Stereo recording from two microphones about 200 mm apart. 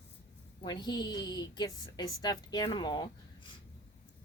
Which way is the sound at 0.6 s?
20° left (ahead or behind).